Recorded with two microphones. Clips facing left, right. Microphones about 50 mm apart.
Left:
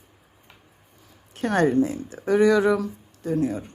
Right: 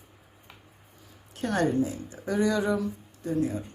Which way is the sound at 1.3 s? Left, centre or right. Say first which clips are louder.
Left 5 dB; left.